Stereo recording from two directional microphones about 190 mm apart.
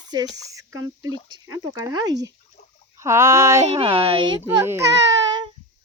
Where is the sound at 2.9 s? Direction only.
15° right (ahead or behind).